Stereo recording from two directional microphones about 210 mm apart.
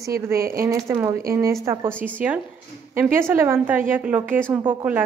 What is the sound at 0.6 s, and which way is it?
A woman's voice, 15° right (ahead or behind).